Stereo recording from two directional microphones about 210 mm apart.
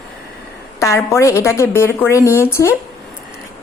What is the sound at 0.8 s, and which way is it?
A woman's voice, 15° left (ahead or behind).